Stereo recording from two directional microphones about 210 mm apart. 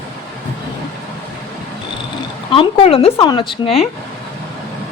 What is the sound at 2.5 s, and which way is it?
A woman's voice, 25° left (ahead or behind).